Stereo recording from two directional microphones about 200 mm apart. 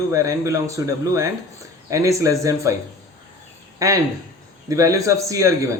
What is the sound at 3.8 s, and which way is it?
Speech, 15° right (ahead or behind).